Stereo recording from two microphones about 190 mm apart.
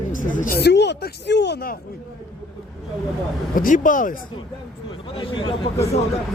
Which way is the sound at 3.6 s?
45° left (ahead or behind).